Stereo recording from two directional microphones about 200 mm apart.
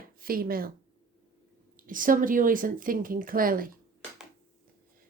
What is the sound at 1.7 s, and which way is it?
Speech, 45° right (ahead or behind).